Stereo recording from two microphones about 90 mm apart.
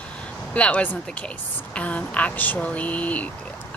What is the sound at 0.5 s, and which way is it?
Speech, 15° left (ahead or behind).